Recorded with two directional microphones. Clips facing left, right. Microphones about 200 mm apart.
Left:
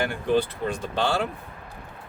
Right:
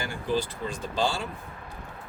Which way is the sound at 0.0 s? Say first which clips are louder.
Left 5 dB; 60° left (ahead or behind).